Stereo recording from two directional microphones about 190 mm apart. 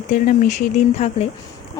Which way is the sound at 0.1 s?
40° left (ahead or behind).